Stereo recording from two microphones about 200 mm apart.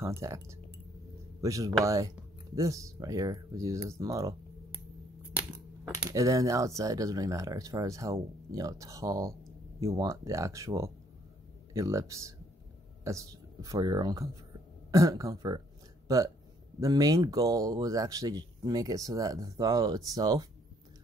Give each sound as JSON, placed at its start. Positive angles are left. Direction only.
{"t": 0.0, "sound": "a man's voice", "side_deg": -15}
{"t": 6.0, "sound": "a man's voice", "side_deg": -15}
{"t": 16.8, "sound": "a man's voice", "side_deg": -15}